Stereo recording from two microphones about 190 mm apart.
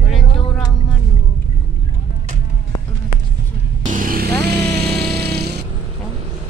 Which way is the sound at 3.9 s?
50° right (ahead or behind).